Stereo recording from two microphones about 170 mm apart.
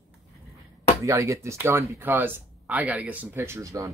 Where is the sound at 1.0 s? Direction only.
20° right (ahead or behind).